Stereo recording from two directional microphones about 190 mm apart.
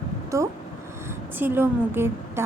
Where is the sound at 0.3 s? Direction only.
15° right (ahead or behind).